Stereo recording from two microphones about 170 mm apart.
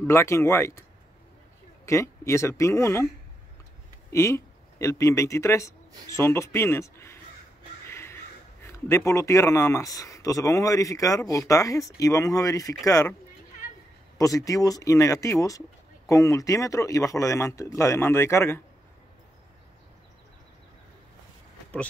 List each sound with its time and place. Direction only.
0.0 s speech: 15° left (ahead or behind)
1.9 s speech: 15° left (ahead or behind)
4.1 s speech: 15° left (ahead or behind)
7.8 s a sound: 15° left (ahead or behind)
8.6 s speech: 15° left (ahead or behind)
14.1 s speech: 20° left (ahead or behind)